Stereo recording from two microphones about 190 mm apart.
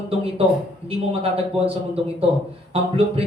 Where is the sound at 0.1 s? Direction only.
30° right (ahead or behind).